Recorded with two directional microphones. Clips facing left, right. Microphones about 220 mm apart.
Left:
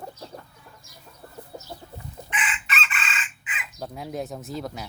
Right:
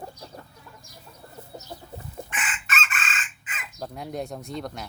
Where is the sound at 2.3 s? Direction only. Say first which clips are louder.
Left 3 dB; 45° right (ahead or behind).